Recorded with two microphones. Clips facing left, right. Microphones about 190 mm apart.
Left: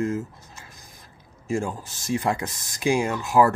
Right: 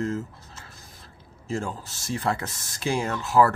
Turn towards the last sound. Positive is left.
turn(degrees=15)  # may be behind; listen again after turning